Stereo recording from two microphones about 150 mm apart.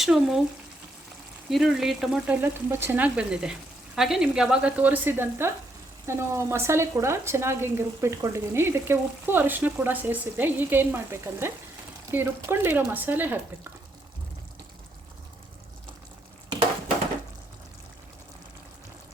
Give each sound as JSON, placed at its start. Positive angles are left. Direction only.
{"t": 0.0, "sound": "speech", "side_deg": -5}
{"t": 1.5, "sound": "speech", "side_deg": 0}